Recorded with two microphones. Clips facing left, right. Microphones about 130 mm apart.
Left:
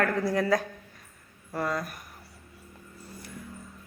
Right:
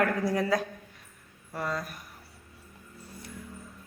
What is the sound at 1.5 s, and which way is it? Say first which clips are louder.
Speech: left 3 dB; centre (ahead or behind).